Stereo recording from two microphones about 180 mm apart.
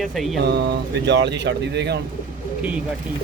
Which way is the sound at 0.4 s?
65° right (ahead or behind).